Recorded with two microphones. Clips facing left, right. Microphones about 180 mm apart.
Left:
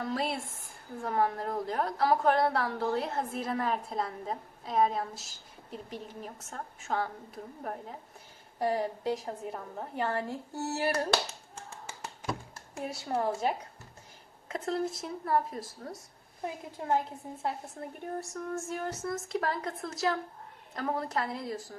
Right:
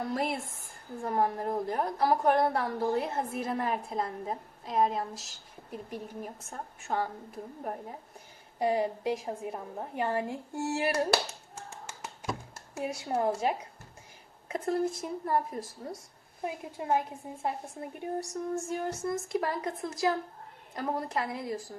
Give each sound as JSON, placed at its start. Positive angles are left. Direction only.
{"t": 0.1, "sound": "a woman's voice", "side_deg": -10}
{"t": 12.7, "sound": "a woman's voice", "side_deg": -5}